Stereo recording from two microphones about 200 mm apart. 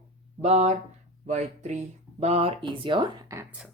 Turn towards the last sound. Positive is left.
turn(degrees=-15)  # may be behind; listen again after turning